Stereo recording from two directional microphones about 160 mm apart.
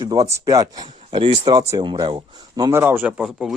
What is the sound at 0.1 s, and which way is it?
Speech, 20° right (ahead or behind).